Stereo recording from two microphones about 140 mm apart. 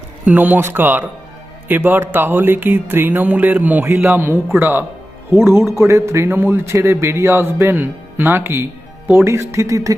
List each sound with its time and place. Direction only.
0.3 s a man's voice: 10° right (ahead or behind)